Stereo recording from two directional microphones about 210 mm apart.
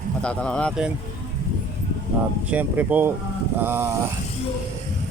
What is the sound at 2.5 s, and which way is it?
Speech, 5° right (ahead or behind).